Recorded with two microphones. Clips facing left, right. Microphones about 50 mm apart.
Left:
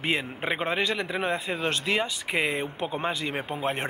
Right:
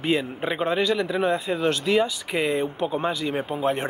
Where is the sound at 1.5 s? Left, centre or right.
Left.